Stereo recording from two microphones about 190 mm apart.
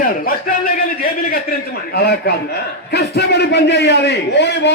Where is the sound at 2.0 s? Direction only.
55° left (ahead or behind).